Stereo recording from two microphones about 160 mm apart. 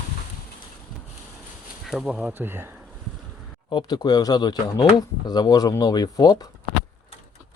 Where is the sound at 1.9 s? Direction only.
5° right (ahead or behind).